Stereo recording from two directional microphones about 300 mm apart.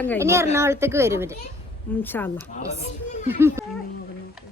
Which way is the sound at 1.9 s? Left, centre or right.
Centre.